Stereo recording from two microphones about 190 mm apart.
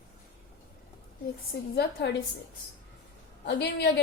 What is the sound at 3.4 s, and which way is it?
Speech, 65° left (ahead or behind).